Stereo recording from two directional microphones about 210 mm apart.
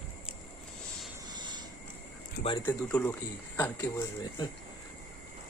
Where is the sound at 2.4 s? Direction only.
25° left (ahead or behind).